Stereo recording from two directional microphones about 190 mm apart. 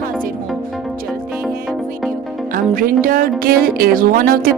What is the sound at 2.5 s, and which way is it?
A woman's voice, 50° right (ahead or behind).